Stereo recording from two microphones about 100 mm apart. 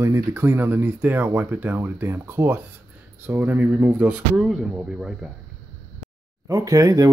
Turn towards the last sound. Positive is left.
turn(degrees=-35)  # may be behind; listen again after turning